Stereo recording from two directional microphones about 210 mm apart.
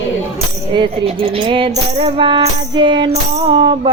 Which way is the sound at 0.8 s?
25° right (ahead or behind).